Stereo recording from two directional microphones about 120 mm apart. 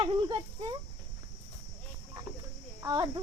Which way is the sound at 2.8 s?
30° right (ahead or behind).